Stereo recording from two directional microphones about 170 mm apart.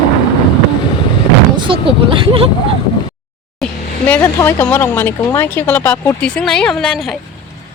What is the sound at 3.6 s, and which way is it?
Speech, 10° left (ahead or behind).